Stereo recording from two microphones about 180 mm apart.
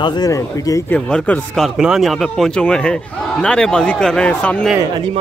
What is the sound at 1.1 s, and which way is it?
Speech, 5° left (ahead or behind).